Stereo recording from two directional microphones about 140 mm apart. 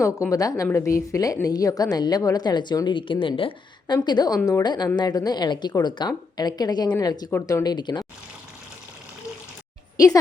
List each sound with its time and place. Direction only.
0.0 s a woman's voice: 20° left (ahead or behind)